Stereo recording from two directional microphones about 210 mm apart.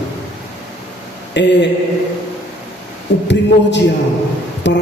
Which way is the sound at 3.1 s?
55° left (ahead or behind).